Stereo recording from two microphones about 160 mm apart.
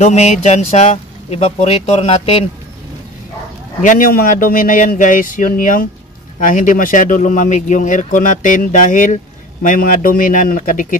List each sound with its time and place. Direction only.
0.0 s speech: 45° left (ahead or behind)
3.8 s speech: 60° left (ahead or behind)